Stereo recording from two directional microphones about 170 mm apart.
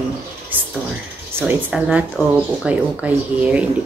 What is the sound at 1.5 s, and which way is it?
Speech, 5° right (ahead or behind).